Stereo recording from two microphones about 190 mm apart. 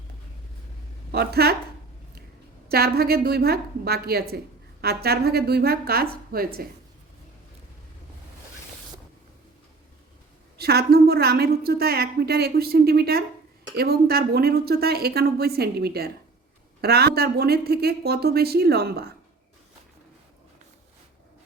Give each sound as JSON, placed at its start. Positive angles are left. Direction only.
{"t": 1.1, "sound": "a woman's voice", "side_deg": -55}
{"t": 2.6, "sound": "a woman's voice", "side_deg": -55}
{"t": 10.6, "sound": "a woman's voice", "side_deg": -55}